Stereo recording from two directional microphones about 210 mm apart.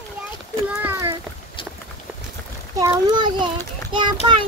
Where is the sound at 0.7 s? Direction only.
10° right (ahead or behind).